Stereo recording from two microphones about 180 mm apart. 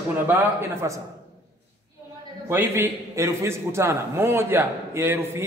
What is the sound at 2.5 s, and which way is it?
A man's voice, 10° right (ahead or behind).